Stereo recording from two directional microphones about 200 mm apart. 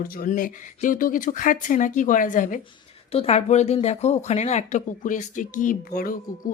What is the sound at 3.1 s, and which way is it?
A woman's voice, 30° left (ahead or behind).